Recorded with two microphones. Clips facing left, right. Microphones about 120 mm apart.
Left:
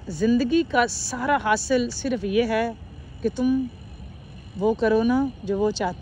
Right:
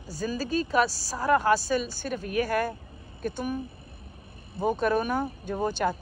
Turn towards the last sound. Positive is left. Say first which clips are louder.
# left 4 dB
turn(degrees=-50)  # may be behind; listen again after turning